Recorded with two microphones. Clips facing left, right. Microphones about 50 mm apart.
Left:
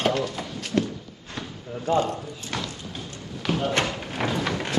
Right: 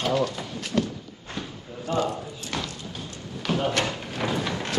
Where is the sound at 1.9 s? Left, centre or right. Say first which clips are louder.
Left 3 dB; left.